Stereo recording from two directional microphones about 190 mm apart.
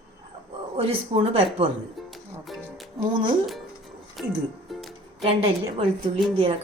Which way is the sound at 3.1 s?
25° right (ahead or behind).